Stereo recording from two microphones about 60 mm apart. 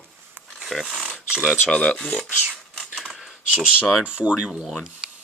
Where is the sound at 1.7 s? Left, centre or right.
Centre.